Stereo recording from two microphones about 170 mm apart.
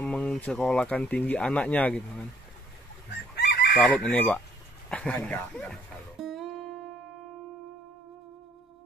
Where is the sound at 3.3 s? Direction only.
75° left (ahead or behind).